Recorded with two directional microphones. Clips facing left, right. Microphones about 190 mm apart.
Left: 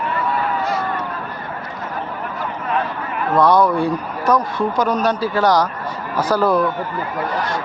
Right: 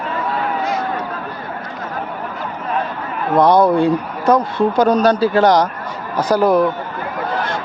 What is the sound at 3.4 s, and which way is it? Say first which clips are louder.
Speech: right 3 dB; 20° right (ahead or behind).